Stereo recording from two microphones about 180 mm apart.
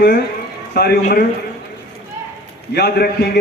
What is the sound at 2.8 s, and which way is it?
Speech, 60° left (ahead or behind).